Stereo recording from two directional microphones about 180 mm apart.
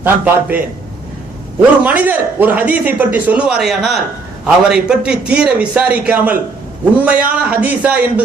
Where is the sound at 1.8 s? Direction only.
10° right (ahead or behind).